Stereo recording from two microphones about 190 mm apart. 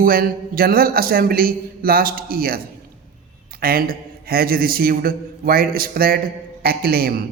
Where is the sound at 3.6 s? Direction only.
50° right (ahead or behind).